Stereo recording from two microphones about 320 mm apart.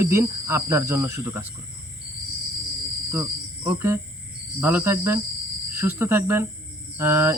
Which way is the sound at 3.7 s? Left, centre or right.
Centre.